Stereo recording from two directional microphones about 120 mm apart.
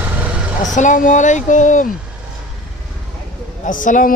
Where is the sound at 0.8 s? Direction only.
90° left.